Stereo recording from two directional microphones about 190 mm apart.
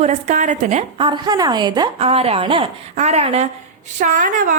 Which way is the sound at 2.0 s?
30° right (ahead or behind).